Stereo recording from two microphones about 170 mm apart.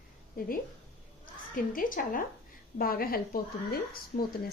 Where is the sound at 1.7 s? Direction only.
55° left (ahead or behind).